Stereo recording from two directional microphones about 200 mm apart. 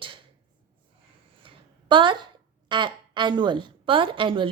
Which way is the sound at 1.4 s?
25° right (ahead or behind).